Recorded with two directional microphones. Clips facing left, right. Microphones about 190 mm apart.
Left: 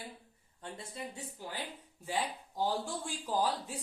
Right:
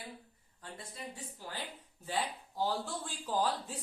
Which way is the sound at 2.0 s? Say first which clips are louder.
Left 1 dB; 15° left (ahead or behind).